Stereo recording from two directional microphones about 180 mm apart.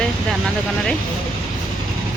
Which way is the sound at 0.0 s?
5° left (ahead or behind).